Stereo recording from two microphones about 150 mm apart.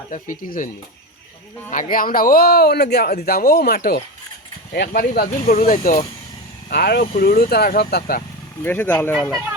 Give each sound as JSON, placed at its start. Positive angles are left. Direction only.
{"t": 0.1, "sound": "speech", "side_deg": 60}
{"t": 1.7, "sound": "speech", "side_deg": 65}
{"t": 6.7, "sound": "speech", "side_deg": 90}
{"t": 8.6, "sound": "speech", "side_deg": 15}